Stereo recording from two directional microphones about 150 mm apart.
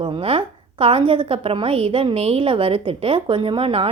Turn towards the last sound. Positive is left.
turn(degrees=-40)  # may be behind; listen again after turning